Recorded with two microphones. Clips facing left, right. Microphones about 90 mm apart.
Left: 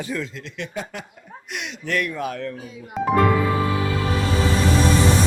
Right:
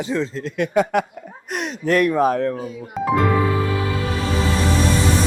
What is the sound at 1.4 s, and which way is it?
Speech, 40° right (ahead or behind).